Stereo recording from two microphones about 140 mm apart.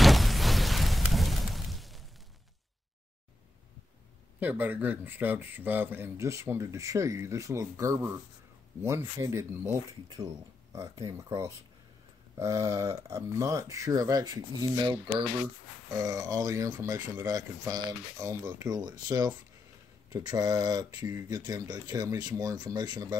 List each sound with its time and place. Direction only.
0.0 s a sound: centre (ahead or behind)
4.4 s speech: 10° right (ahead or behind)
12.4 s speech: 20° right (ahead or behind)